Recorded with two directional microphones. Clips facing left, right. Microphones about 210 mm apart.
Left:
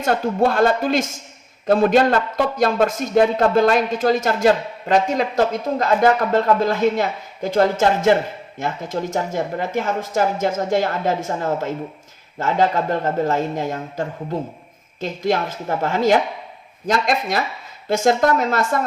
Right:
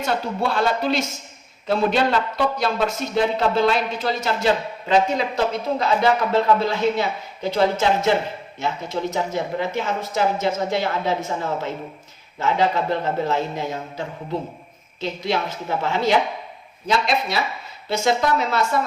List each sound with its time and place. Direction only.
0.0 s a man's voice: 50° left (ahead or behind)
12.4 s a man's voice: 45° left (ahead or behind)